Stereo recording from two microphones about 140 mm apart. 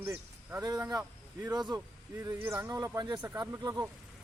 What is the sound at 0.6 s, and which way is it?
Speech, 30° right (ahead or behind).